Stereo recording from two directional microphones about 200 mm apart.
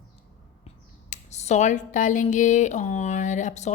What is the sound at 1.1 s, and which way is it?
A woman's voice, 35° left (ahead or behind).